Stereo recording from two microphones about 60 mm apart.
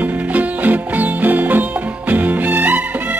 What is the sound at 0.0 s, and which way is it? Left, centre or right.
Music, right.